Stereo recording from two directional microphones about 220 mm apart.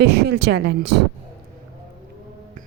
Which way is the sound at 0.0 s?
50° right (ahead or behind).